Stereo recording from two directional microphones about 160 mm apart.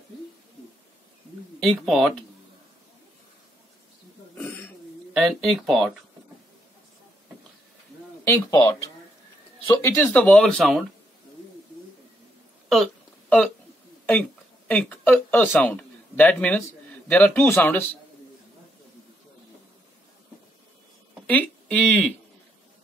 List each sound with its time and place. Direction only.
1.6 s speech: centre (ahead or behind)
5.1 s speech: centre (ahead or behind)
8.2 s speech: 20° left (ahead or behind); by 10.9 s centre (ahead or behind)
12.6 s hiccup: centre (ahead or behind)
14.7 s speech: 10° left (ahead or behind)
21.3 s speech: 10° left (ahead or behind)